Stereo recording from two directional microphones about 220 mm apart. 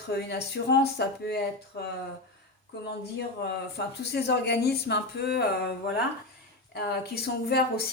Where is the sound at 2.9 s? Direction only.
50° left (ahead or behind).